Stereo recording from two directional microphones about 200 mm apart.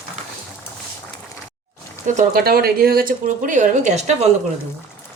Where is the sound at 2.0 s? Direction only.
45° right (ahead or behind).